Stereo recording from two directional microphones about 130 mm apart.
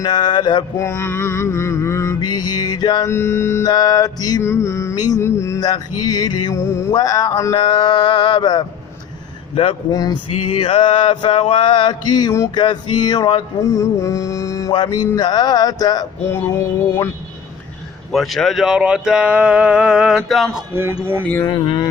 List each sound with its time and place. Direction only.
0.0 s male singing: 35° left (ahead or behind)
0.8 s mantra: 20° left (ahead or behind)
3.1 s mantra: 20° left (ahead or behind)
3.7 s mantra: 30° left (ahead or behind)
6.9 s male singing: 25° left (ahead or behind)
9.9 s mantra: 30° left (ahead or behind)
10.6 s male singing: 45° left (ahead or behind)
11.3 s a sound: 55° left (ahead or behind)
11.6 s male singing: 35° left (ahead or behind)
12.5 s mantra: 35° left (ahead or behind)
14.8 s male singing: 30° left (ahead or behind)
18.1 s speech: centre (ahead or behind)
20.7 s speech: 15° right (ahead or behind)
21.4 s male singing: 35° left (ahead or behind)